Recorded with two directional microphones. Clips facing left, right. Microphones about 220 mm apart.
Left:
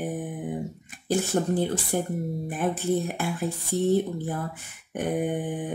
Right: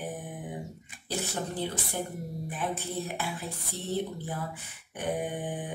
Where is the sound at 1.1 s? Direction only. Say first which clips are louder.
Left 10 dB; 50° left (ahead or behind).